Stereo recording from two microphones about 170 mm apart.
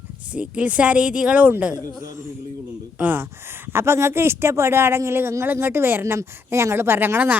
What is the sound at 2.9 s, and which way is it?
Speech, 10° right (ahead or behind).